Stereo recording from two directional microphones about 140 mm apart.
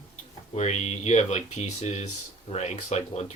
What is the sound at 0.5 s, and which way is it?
Speech, 55° left (ahead or behind).